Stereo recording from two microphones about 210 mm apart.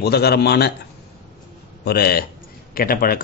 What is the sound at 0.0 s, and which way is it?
Speech, 50° left (ahead or behind).